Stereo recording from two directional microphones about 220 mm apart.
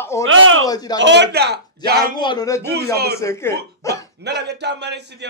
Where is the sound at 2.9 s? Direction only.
45° right (ahead or behind).